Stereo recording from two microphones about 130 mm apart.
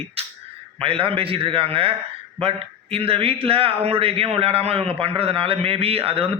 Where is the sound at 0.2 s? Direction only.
50° right (ahead or behind).